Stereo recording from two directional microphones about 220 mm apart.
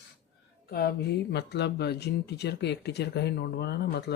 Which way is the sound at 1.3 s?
50° left (ahead or behind).